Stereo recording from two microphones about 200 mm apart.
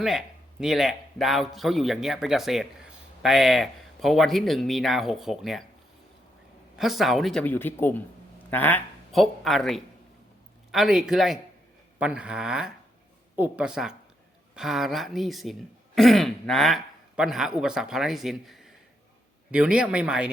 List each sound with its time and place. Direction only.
0.0 s a man's voice: centre (ahead or behind)
6.7 s a man's voice: centre (ahead or behind)